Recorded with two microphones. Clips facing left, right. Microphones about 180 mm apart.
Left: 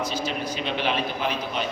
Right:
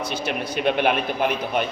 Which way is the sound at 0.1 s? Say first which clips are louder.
Right 2 dB; 60° right (ahead or behind).